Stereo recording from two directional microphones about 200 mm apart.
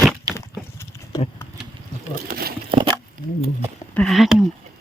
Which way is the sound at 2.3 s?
50° right (ahead or behind).